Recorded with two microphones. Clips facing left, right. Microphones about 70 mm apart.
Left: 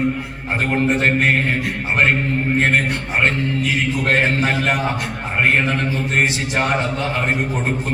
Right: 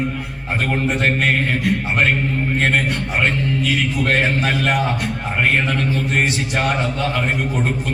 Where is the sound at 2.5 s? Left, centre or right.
Left.